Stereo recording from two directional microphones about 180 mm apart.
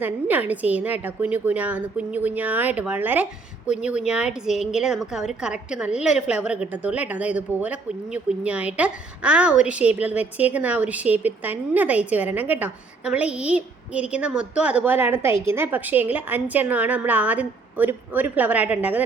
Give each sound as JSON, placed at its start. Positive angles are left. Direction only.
{"t": 0.0, "sound": "a woman's voice", "side_deg": -10}